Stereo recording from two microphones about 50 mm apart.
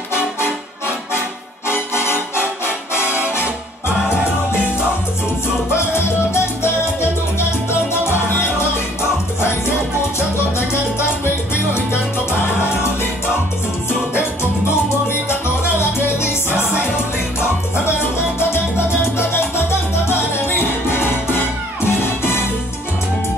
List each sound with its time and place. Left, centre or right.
1.7 s music: left
6.3 s music: left
11.2 s music: left
15.0 s salsa music: left
15.8 s music: left
19.1 s music: left